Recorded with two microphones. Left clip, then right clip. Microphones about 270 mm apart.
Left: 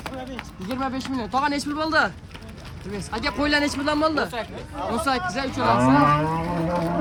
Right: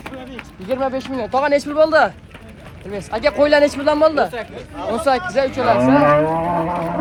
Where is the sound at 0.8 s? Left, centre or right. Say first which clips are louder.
Right 4 dB; centre.